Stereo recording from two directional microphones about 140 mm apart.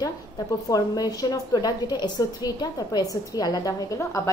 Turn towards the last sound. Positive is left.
turn(degrees=25)  # may be behind; listen again after turning